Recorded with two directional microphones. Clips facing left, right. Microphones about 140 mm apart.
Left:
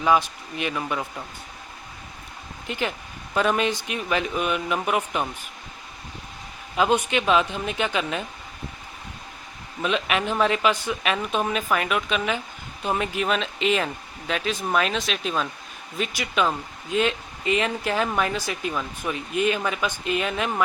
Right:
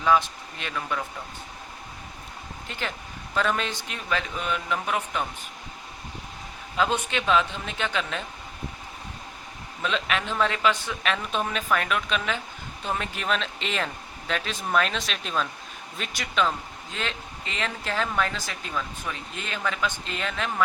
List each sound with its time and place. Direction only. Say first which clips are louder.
0.0 s speech: left 1 dB; 15° left (ahead or behind)
2.6 s speech: left 6 dB; 15° left (ahead or behind)
6.7 s speech: left 4 dB; 15° left (ahead or behind)
9.8 s speech: left 4 dB; 15° left (ahead or behind)